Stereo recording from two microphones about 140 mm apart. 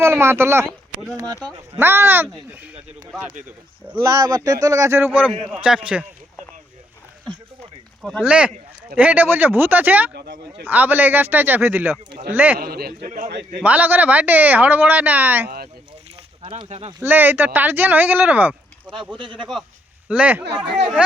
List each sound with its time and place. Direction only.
0.0 s speech: 15° right (ahead or behind)
1.1 s a man's voice: 30° right (ahead or behind)
1.7 s speech: 15° right (ahead or behind)
3.9 s a man's voice: 25° right (ahead or behind); by 6.1 s 10° right (ahead or behind)
8.2 s speech: 10° right (ahead or behind)
12.5 s a man's voice: 90° right; by 13.3 s 70° right (ahead or behind)
13.6 s speech: 10° right (ahead or behind)
15.4 s a man's voice: 90° right
16.6 s speech: 50° right (ahead or behind)
17.1 s speech: 15° right (ahead or behind)
19.1 s speech: 35° right (ahead or behind)
20.1 s speech: 10° right (ahead or behind)